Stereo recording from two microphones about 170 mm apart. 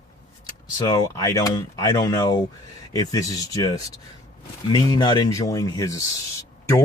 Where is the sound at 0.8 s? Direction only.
20° left (ahead or behind).